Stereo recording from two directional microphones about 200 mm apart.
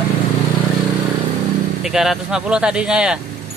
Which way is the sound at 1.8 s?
Centre (ahead or behind).